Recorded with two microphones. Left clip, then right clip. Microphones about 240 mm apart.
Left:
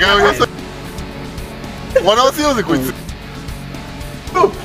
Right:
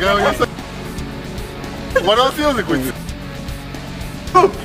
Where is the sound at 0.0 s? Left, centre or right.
Left.